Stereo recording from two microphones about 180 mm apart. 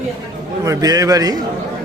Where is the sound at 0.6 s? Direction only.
20° right (ahead or behind).